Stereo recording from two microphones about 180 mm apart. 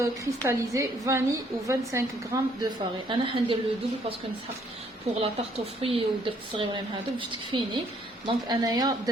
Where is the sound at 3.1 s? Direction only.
25° right (ahead or behind).